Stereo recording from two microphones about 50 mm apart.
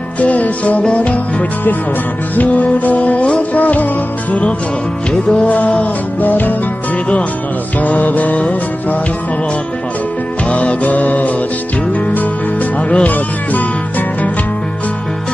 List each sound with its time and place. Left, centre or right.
0.2 s music: left
2.3 s music: left
5.5 s music: left
7.8 s music: left
10.5 s music: left
12.9 s music: left